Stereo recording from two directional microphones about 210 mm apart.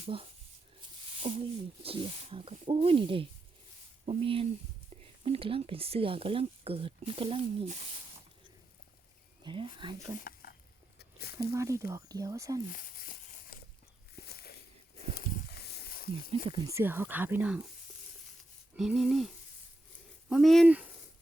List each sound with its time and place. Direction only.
0.0 s speech: 25° right (ahead or behind)
9.4 s speech: 20° right (ahead or behind)
10.2 s a sound: 45° left (ahead or behind)
11.5 s speech: 15° right (ahead or behind)
12.7 s a sound: 45° left (ahead or behind)
16.6 s speech: 10° right (ahead or behind)
18.8 s speech: 5° right (ahead or behind)
20.3 s speech: centre (ahead or behind)